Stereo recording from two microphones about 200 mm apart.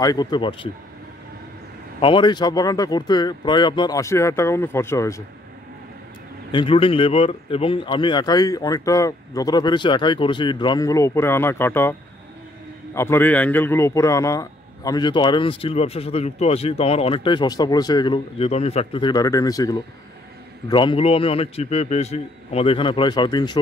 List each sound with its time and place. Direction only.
0.0 s a man's voice: 20° left (ahead or behind)
2.0 s a man's voice: 25° left (ahead or behind)
6.5 s a man's voice: 25° left (ahead or behind)
12.9 s a man's voice: 10° left (ahead or behind)